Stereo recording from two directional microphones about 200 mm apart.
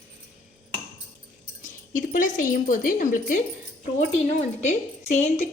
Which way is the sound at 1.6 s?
40° left (ahead or behind).